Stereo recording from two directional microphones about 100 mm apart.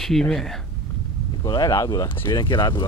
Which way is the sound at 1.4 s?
40° left (ahead or behind).